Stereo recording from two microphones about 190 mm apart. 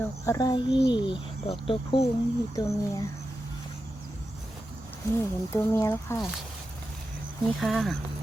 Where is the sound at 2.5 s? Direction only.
15° left (ahead or behind).